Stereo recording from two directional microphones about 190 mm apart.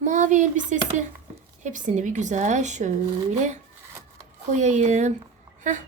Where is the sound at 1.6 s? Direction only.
40° right (ahead or behind).